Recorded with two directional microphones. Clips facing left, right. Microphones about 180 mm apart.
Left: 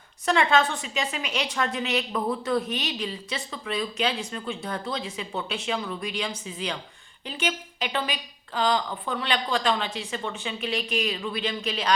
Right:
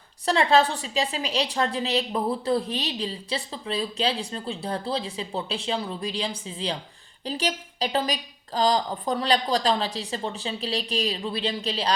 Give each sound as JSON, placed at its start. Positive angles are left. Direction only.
{"t": 0.3, "sound": "a woman's voice", "side_deg": -35}